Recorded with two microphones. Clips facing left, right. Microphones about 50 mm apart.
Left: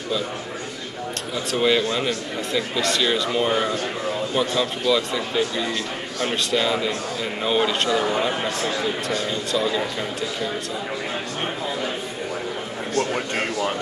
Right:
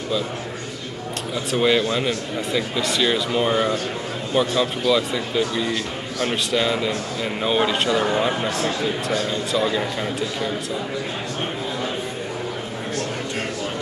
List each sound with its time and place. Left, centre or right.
1.5 s speech: centre
8.5 s speech: right
9.5 s speech: centre